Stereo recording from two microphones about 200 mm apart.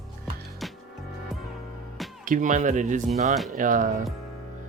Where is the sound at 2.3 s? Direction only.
40° right (ahead or behind).